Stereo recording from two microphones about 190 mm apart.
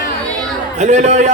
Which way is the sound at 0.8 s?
40° right (ahead or behind).